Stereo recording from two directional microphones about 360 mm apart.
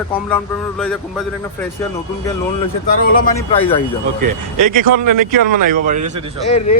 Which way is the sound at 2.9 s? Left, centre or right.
Left.